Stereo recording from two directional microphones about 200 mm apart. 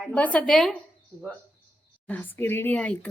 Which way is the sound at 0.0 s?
5° left (ahead or behind).